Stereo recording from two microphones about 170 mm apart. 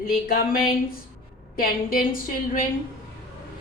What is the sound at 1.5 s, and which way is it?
A woman's voice, 55° left (ahead or behind).